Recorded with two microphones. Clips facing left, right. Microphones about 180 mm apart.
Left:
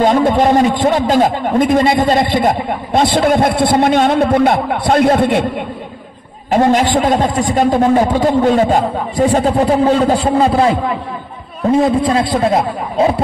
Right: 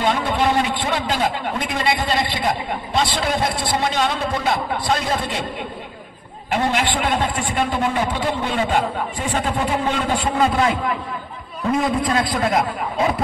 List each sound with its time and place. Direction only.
0.0 s a man's voice: 45° left (ahead or behind)
6.5 s a man's voice: 40° left (ahead or behind)